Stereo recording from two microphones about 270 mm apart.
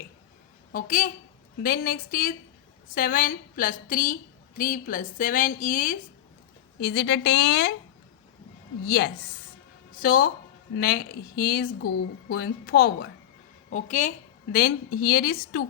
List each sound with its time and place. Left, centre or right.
0.7 s a woman's voice: left
8.8 s a woman's voice: left